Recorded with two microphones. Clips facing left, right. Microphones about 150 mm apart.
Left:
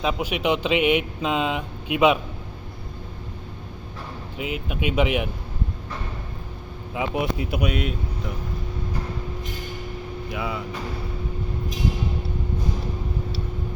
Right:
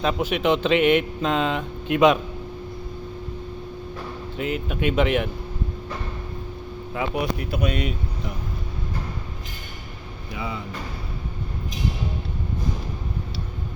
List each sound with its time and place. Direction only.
0.0 s speech: 10° left (ahead or behind)
4.4 s speech: 5° left (ahead or behind)
6.9 s speech: 15° left (ahead or behind)
7.6 s speech: 5° left (ahead or behind)